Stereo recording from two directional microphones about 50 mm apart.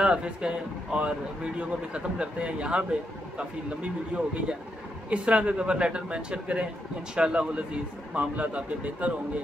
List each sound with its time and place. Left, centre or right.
0.0 s speech: centre